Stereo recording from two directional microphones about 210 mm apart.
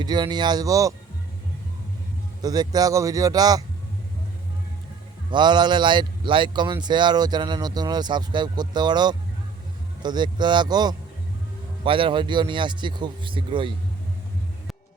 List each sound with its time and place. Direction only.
0.0 s speech: 20° right (ahead or behind)
2.4 s speech: 20° right (ahead or behind)
5.3 s speech: 20° right (ahead or behind)